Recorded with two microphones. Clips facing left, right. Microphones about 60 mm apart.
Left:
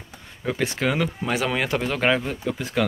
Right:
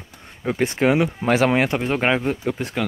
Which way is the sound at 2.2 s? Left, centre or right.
Right.